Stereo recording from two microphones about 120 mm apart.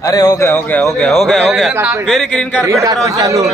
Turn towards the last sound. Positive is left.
turn(degrees=-25)  # may be behind; listen again after turning